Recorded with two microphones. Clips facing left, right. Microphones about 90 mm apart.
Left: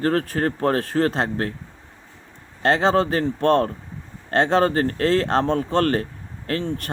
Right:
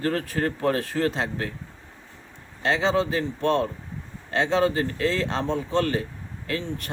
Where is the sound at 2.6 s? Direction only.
50° left (ahead or behind).